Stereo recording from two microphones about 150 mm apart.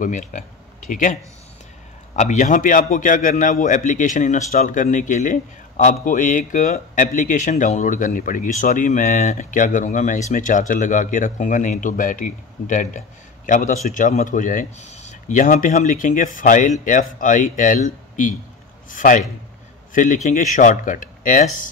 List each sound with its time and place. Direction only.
0.0 s speech: 55° left (ahead or behind)
2.1 s a man's voice: 55° left (ahead or behind)